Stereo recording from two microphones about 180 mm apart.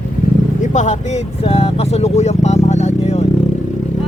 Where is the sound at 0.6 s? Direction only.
40° left (ahead or behind).